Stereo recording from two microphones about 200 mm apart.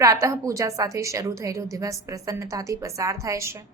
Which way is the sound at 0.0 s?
15° right (ahead or behind).